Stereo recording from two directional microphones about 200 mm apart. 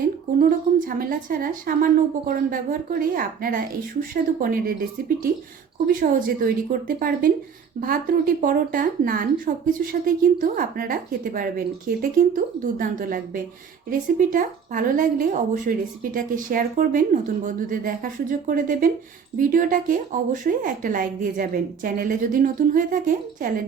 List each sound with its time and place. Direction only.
0.3 s a woman's voice: 45° right (ahead or behind)